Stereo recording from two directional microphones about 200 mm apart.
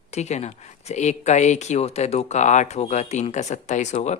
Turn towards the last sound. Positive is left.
turn(degrees=35)  # may be behind; listen again after turning